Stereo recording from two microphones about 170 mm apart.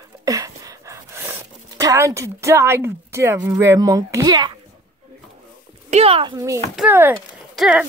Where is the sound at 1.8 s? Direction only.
20° right (ahead or behind).